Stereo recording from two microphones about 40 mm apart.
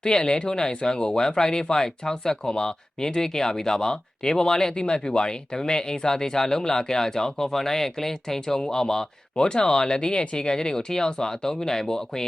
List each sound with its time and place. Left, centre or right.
0.0 s speech: centre